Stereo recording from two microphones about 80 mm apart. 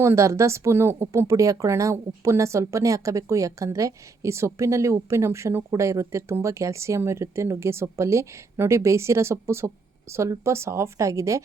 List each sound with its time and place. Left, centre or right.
0.0 s speech: right